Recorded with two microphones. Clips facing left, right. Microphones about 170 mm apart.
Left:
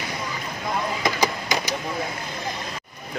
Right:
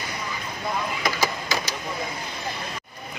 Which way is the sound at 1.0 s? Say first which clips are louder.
Left 3 dB; 20° left (ahead or behind).